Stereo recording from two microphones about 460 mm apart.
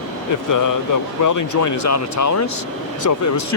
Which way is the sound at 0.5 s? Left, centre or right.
Left.